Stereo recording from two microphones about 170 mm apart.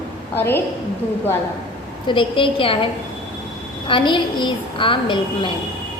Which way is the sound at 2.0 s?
30° left (ahead or behind).